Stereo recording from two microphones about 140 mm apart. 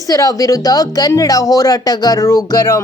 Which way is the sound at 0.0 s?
25° left (ahead or behind).